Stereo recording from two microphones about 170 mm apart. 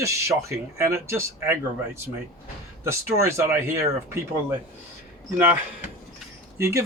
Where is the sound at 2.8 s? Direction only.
15° right (ahead or behind).